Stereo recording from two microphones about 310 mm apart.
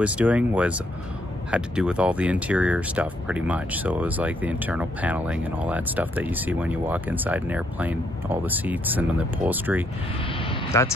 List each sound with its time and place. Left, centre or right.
0.0 s speech: centre
10.2 s vehicle: centre